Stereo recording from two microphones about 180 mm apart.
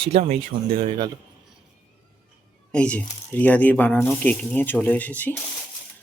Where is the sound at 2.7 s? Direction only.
5° left (ahead or behind).